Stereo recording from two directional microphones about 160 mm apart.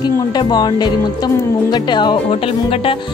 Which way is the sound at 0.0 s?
25° left (ahead or behind).